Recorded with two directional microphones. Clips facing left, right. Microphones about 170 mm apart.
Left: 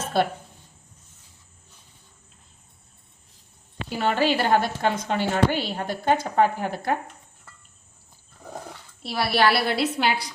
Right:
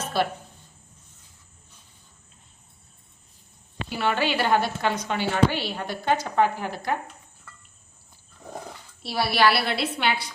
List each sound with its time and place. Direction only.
0.0 s a sound: 50° left (ahead or behind)
3.9 s a woman's voice: 40° left (ahead or behind)
9.0 s a woman's voice: 50° left (ahead or behind)